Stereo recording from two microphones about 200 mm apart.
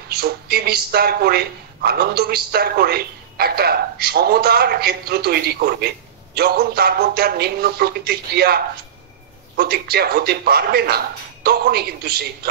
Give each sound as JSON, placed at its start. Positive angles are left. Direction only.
{"t": 0.1, "sound": "speech", "side_deg": -50}